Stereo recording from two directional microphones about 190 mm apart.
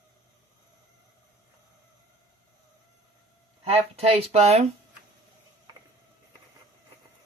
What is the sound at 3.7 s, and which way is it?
Speech, 30° right (ahead or behind).